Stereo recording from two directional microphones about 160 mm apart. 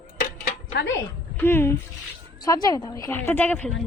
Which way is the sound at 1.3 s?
15° left (ahead or behind).